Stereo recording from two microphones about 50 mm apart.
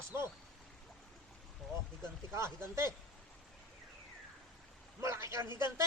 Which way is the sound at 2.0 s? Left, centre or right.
Right.